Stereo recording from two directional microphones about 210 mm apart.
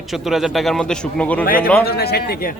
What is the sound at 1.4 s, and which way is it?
Speech, 45° left (ahead or behind).